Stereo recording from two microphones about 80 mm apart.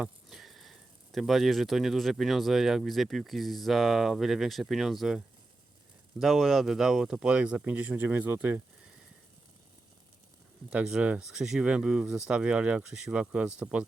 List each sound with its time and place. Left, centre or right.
0.0 s speech: centre; by 8.6 s right
10.7 s speech: centre